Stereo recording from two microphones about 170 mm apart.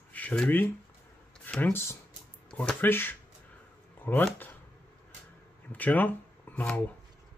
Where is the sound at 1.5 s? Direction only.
10° left (ahead or behind).